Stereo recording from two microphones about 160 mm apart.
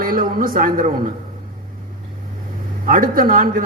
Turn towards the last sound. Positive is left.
turn(degrees=-60)  # may be behind; listen again after turning